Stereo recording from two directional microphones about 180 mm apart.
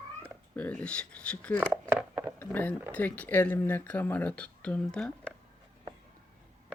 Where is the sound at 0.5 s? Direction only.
5° left (ahead or behind).